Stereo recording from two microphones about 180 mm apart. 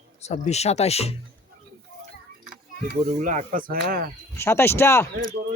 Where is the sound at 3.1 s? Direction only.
45° right (ahead or behind).